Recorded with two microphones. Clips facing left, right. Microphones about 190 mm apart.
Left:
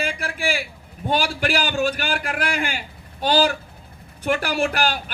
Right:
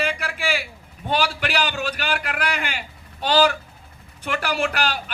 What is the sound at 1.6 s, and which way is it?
Speech, 50° left (ahead or behind).